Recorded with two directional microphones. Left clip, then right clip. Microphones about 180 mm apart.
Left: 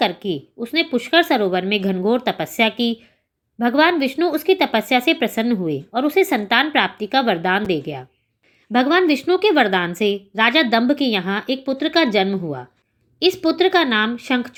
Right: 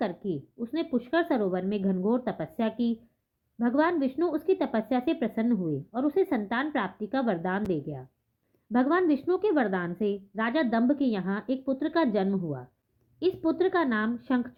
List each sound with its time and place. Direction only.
0.0 s speech: 20° left (ahead or behind)